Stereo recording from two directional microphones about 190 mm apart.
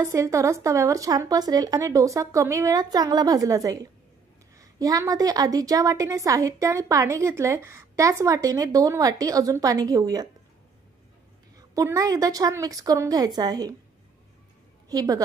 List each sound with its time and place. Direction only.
0.0 s a woman's voice: 15° right (ahead or behind)
11.5 s a woman's voice: 15° right (ahead or behind)
14.9 s a woman's voice: 20° right (ahead or behind)